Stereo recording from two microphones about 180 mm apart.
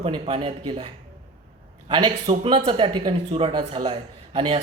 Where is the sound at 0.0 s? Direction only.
30° right (ahead or behind).